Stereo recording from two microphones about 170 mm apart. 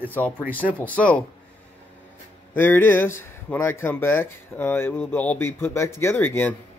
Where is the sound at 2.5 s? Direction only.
10° left (ahead or behind).